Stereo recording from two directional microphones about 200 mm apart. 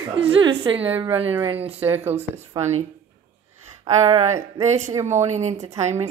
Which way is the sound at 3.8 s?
20° right (ahead or behind).